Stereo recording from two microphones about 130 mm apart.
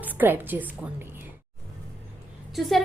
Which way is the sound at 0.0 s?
15° right (ahead or behind).